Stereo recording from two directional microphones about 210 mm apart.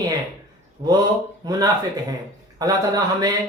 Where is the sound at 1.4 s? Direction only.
20° right (ahead or behind).